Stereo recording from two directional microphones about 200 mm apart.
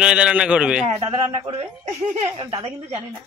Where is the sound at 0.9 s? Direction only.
30° right (ahead or behind).